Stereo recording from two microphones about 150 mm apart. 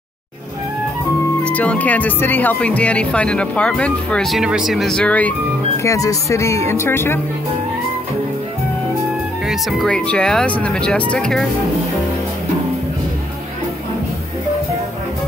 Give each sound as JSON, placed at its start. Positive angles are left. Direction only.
{"t": 1.4, "sound": "speech", "side_deg": 10}
{"t": 5.9, "sound": "speech", "side_deg": 20}
{"t": 9.5, "sound": "speech", "side_deg": 0}